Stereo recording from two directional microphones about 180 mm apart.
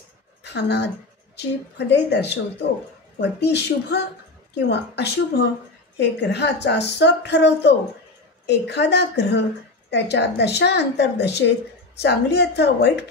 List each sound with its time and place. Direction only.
0.4 s a woman's voice: 70° left (ahead or behind)